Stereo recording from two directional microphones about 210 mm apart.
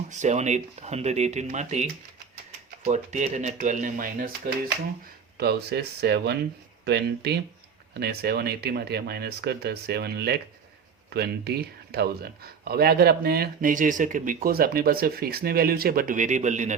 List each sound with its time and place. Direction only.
0.1 s speech: 35° right (ahead or behind)
5.4 s speech: 50° right (ahead or behind); by 16.7 s 35° right (ahead or behind)